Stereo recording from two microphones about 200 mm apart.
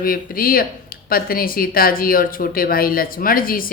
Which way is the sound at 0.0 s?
45° left (ahead or behind).